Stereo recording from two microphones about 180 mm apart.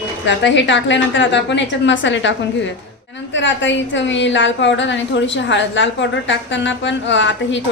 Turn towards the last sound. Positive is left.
turn(degrees=90)